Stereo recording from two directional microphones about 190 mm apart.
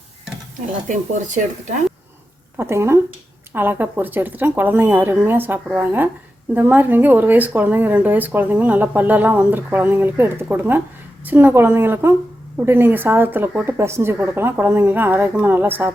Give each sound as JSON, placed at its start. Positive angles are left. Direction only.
{"t": 0.9, "sound": "speech", "side_deg": -40}
{"t": 2.6, "sound": "speech", "side_deg": -15}